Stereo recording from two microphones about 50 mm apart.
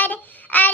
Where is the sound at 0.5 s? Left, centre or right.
Left.